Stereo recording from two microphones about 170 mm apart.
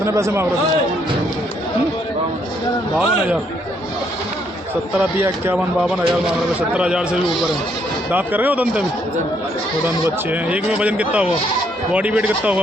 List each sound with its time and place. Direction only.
0.0 s speech: 15° right (ahead or behind)
4.9 s speech: 10° right (ahead or behind)
6.7 s a man's voice: 5° right (ahead or behind)
10.5 s speech: 5° right (ahead or behind)